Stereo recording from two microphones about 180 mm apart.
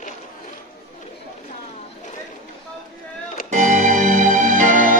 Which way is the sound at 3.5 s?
45° right (ahead or behind).